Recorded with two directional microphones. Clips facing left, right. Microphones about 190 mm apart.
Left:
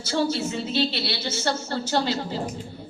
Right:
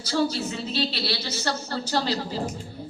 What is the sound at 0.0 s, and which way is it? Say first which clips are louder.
A woman's voice: left 1 dB; 25° left (ahead or behind).